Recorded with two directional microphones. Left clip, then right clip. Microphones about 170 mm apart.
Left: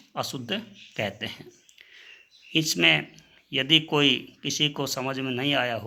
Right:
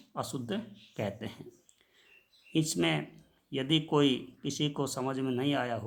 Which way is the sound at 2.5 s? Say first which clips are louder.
Left 9 dB; 10° left (ahead or behind).